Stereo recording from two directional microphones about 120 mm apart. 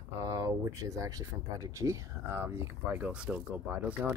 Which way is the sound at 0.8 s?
25° right (ahead or behind).